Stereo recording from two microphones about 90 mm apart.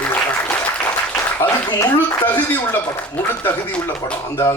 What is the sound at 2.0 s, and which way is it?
Speech, 20° left (ahead or behind).